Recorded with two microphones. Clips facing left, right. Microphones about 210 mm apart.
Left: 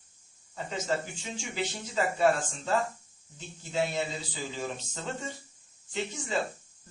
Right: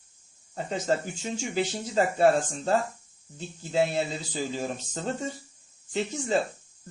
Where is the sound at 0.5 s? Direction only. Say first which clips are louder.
Right 4 dB; 40° right (ahead or behind).